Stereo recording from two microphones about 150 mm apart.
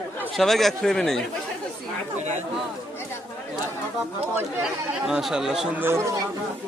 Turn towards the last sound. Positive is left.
turn(degrees=-15)  # may be behind; listen again after turning